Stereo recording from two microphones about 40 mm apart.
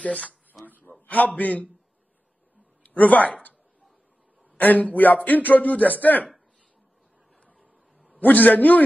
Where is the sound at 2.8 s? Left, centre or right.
Left.